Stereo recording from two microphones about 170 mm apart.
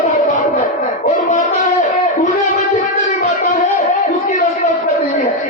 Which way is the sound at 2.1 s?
50° left (ahead or behind).